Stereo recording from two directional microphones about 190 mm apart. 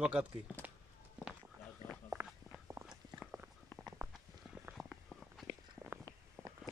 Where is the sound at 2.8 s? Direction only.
15° right (ahead or behind).